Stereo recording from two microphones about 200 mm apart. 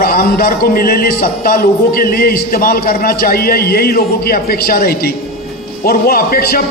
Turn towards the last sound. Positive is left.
turn(degrees=50)  # may be behind; listen again after turning